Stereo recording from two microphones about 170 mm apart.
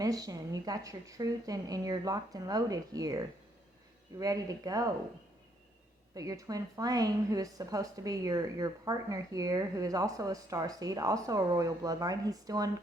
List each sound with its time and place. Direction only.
0.0 s a woman's voice: 20° right (ahead or behind)
6.1 s a woman's voice: 20° right (ahead or behind)